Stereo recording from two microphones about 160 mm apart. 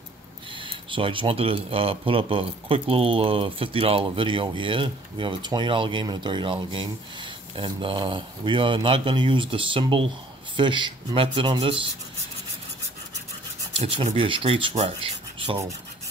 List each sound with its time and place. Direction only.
0.6 s speech: 30° right (ahead or behind)
13.7 s speech: 35° right (ahead or behind)